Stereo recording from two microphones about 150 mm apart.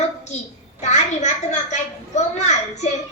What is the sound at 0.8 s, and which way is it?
A child's voice, 50° left (ahead or behind).